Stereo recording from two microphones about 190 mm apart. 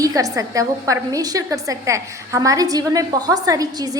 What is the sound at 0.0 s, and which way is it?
A woman's voice, 20° right (ahead or behind).